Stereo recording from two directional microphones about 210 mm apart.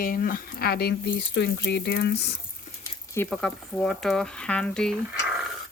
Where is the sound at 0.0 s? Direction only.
40° left (ahead or behind).